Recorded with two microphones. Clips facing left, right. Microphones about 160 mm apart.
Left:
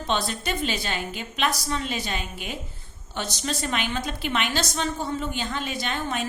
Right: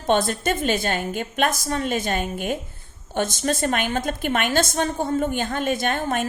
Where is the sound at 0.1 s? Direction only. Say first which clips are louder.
Right 7 dB; 50° right (ahead or behind).